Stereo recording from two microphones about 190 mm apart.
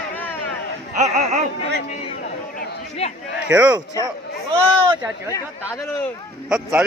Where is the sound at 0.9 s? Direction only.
40° right (ahead or behind).